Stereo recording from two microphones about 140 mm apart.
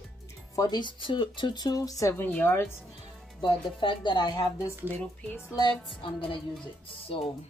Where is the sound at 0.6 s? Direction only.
30° left (ahead or behind); by 2.8 s 15° left (ahead or behind).